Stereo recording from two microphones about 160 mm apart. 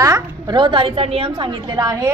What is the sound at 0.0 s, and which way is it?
A woman's voice, 25° right (ahead or behind).